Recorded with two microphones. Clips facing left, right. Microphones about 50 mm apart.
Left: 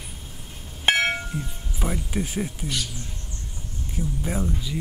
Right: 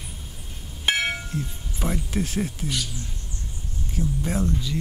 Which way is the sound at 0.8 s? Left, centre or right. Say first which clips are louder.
Left 3 dB; left.